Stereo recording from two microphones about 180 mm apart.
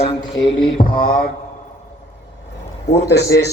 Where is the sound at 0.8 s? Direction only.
55° left (ahead or behind).